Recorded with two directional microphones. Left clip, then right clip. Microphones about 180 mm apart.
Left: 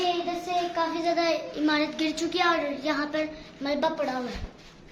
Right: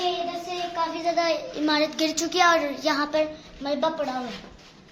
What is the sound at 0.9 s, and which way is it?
Speech, 5° right (ahead or behind).